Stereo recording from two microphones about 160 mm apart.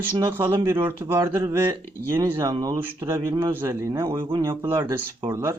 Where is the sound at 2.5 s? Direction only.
25° right (ahead or behind).